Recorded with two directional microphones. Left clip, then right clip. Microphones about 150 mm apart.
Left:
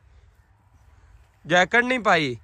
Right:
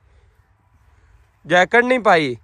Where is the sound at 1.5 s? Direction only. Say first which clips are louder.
Right 5 dB; 15° left (ahead or behind).